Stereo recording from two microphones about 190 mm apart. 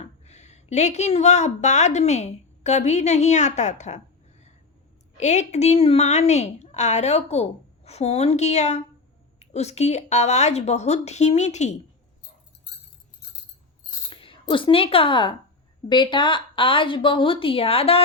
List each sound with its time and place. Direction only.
0.0 s speech: 35° left (ahead or behind)
14.1 s a woman's voice: 25° left (ahead or behind)